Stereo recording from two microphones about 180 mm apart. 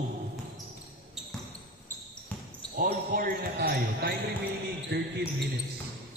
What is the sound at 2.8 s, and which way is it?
Speech, 50° right (ahead or behind).